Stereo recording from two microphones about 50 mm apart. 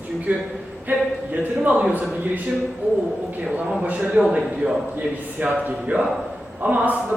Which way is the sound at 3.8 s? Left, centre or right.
Right.